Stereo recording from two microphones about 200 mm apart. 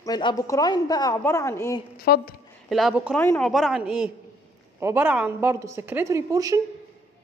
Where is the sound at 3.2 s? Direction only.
10° left (ahead or behind).